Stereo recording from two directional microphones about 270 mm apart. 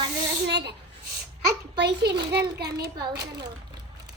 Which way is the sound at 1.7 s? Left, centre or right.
Right.